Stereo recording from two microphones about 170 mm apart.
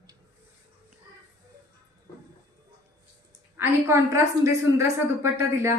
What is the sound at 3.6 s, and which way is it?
A woman's voice, 15° right (ahead or behind).